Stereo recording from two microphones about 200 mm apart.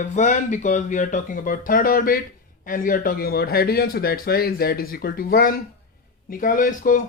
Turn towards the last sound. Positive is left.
turn(degrees=40)  # may be behind; listen again after turning